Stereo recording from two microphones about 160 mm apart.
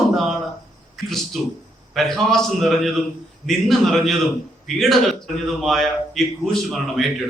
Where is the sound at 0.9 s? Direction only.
Centre (ahead or behind).